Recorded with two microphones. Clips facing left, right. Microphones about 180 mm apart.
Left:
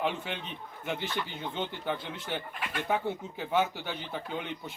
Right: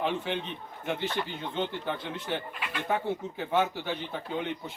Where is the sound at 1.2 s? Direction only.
50° right (ahead or behind).